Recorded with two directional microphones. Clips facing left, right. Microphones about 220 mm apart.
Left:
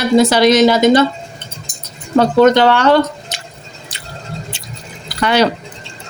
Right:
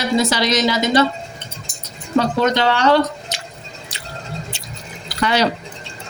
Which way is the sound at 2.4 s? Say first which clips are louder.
Left 6 dB; 50° left (ahead or behind).